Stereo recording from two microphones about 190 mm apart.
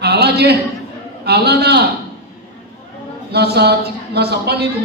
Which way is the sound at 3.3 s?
60° right (ahead or behind).